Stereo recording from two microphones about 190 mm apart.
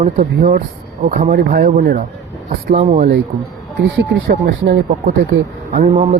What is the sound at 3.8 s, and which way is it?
Speech, 65° right (ahead or behind).